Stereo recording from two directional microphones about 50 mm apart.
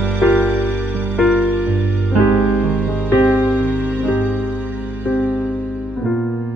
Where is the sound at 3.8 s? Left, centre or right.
Right.